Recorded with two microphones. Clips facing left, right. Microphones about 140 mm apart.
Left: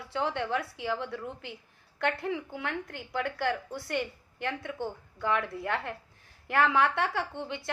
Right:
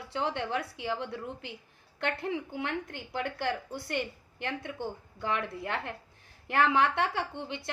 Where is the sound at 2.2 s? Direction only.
25° right (ahead or behind).